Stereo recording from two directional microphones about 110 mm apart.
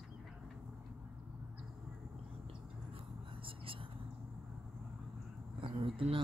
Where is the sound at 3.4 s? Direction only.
55° right (ahead or behind).